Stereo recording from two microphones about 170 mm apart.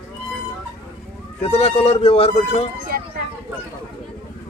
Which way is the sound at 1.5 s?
40° left (ahead or behind).